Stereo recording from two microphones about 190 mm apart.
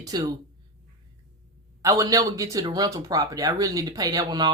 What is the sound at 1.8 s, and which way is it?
Speech, 15° right (ahead or behind).